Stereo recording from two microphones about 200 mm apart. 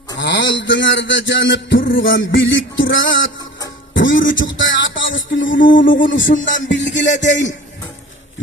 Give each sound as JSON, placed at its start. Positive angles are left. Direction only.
{"t": 0.2, "sound": "a man's voice", "side_deg": 65}
{"t": 1.9, "sound": "music", "side_deg": 70}
{"t": 4.4, "sound": "a sound", "side_deg": 70}
{"t": 5.6, "sound": "speech", "side_deg": 45}
{"t": 6.0, "sound": "music", "side_deg": 70}